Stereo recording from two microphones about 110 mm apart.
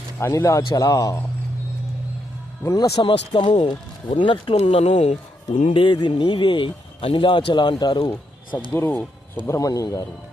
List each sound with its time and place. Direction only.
0.2 s speech: 25° left (ahead or behind)
2.6 s speech: 30° left (ahead or behind)
3.0 s speech: 50° left (ahead or behind); by 5.1 s 75° left (ahead or behind)
5.7 s speech: 45° left (ahead or behind)
8.7 s speech: 20° left (ahead or behind)
9.5 s speech: 30° left (ahead or behind)